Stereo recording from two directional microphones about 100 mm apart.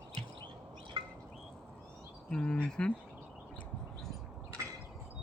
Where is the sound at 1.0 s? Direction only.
60° right (ahead or behind).